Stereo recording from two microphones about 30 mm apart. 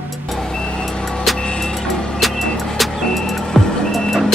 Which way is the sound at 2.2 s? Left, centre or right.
Centre.